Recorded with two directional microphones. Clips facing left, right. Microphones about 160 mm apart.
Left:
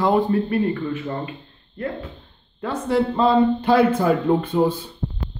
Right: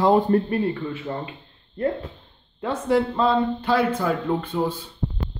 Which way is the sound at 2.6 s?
15° right (ahead or behind).